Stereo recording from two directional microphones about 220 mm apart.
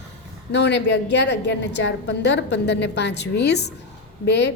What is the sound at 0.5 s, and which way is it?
A woman's voice, 50° left (ahead or behind).